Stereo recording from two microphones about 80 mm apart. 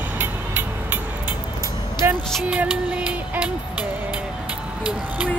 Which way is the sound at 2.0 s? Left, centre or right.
Right.